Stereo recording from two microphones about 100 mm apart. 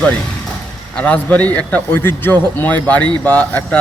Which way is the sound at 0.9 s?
15° left (ahead or behind).